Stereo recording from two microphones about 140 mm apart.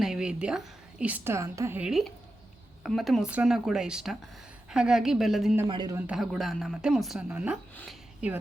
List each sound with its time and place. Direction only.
0.0 s a woman's voice: 5° right (ahead or behind); by 1.8 s 20° right (ahead or behind)
1.8 s speech: centre (ahead or behind)
5.6 s speech: 35° right (ahead or behind)
6.0 s a woman's voice: 5° right (ahead or behind)
7.9 s a sound: 10° right (ahead or behind)